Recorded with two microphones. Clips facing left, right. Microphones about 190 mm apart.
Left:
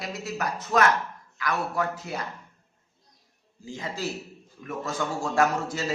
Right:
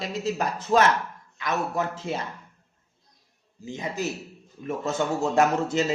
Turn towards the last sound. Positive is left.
turn(degrees=-25)  # may be behind; listen again after turning